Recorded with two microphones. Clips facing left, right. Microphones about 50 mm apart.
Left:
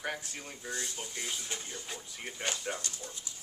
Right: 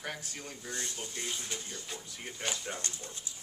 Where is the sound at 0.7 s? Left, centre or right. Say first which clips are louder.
Left 1 dB; left.